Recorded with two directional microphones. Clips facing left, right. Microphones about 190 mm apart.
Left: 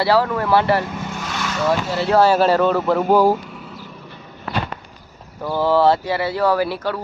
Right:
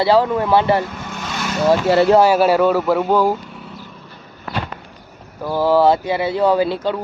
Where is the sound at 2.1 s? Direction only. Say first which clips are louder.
Right 2 dB; 10° right (ahead or behind).